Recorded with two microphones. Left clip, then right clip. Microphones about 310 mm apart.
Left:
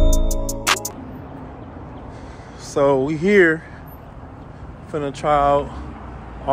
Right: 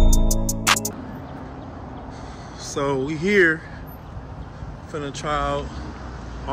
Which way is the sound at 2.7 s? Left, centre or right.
Centre.